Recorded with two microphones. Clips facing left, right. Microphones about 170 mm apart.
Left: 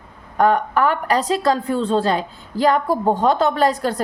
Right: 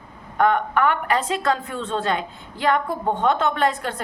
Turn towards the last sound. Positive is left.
turn(degrees=35)  # may be behind; listen again after turning